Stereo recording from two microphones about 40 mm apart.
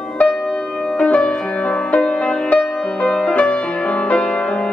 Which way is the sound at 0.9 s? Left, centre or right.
Left.